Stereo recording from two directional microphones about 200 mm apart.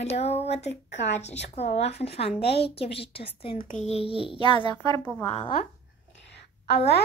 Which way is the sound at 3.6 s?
35° left (ahead or behind).